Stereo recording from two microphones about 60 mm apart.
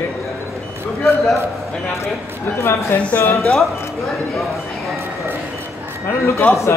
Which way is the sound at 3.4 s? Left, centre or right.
Centre.